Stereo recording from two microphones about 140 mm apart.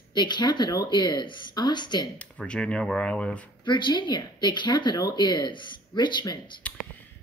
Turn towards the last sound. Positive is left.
turn(degrees=10)  # may be behind; listen again after turning